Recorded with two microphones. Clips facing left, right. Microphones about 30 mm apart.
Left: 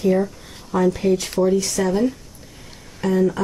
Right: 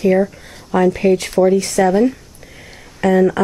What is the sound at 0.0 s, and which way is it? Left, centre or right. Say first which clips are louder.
Speech: right 5 dB; right.